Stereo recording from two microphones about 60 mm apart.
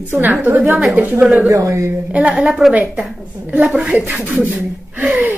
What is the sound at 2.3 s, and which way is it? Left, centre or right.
A woman's voice, centre.